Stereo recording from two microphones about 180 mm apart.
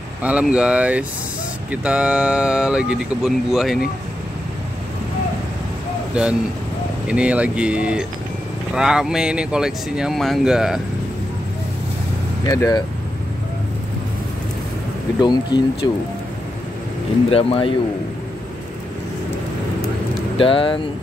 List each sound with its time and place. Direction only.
0.2 s speech: 5° right (ahead or behind)
7.1 s speech: 5° right (ahead or behind)
12.4 s speech: 20° left (ahead or behind)
15.1 s speech: 25° left (ahead or behind)
17.3 s speech: 30° left (ahead or behind)
20.3 s speech: 30° left (ahead or behind)